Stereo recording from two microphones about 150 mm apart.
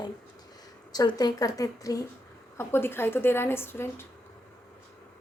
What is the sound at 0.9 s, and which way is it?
A woman's voice, 25° left (ahead or behind).